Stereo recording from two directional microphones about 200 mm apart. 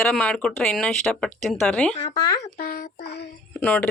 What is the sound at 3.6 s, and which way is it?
Speech, 10° left (ahead or behind).